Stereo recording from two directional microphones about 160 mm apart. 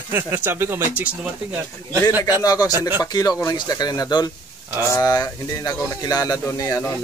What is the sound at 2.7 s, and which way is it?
Speech, 10° right (ahead or behind).